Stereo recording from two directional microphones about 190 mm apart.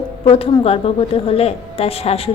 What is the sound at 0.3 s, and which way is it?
A woman's voice, 30° left (ahead or behind).